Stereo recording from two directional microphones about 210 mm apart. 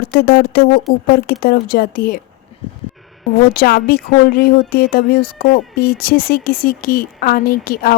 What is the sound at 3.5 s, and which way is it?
A woman's voice, 45° left (ahead or behind).